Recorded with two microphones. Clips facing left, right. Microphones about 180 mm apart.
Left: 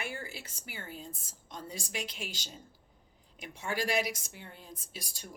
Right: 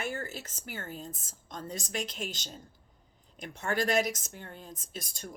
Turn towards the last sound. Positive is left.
turn(degrees=10)  # may be behind; listen again after turning